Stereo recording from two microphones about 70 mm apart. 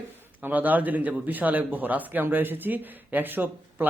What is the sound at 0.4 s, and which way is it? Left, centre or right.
Speech, right.